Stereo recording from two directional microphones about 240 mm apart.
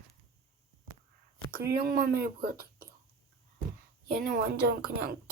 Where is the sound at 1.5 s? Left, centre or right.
Right.